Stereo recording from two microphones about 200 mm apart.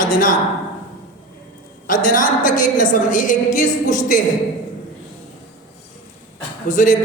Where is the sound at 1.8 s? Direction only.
40° left (ahead or behind).